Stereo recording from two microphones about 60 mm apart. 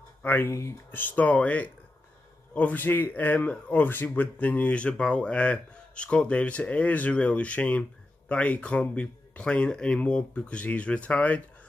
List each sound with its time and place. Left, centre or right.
0.2 s speech: left
0.5 s speech: left
0.9 s speech: left